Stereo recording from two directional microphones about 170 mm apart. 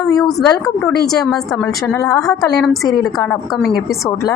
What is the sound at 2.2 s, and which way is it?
Speech, centre (ahead or behind).